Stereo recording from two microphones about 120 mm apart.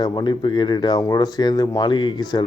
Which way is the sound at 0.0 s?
35° left (ahead or behind).